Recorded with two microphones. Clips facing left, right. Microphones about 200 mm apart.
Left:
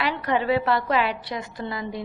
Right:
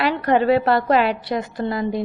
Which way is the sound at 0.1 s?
45° right (ahead or behind).